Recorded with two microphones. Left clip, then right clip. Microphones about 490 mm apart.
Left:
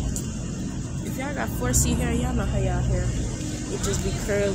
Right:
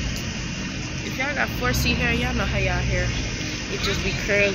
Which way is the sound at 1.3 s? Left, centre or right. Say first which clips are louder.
Right 1 dB; left.